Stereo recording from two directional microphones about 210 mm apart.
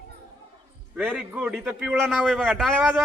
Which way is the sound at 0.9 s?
5° right (ahead or behind).